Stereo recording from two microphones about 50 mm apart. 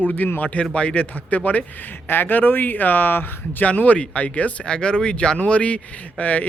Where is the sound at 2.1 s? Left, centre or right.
Left.